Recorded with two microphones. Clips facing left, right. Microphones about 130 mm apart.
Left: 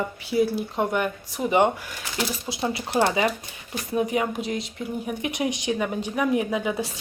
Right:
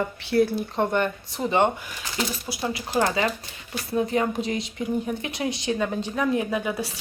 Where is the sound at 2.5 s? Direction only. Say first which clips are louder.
Left 1 dB; 25° left (ahead or behind); by 4.6 s centre (ahead or behind).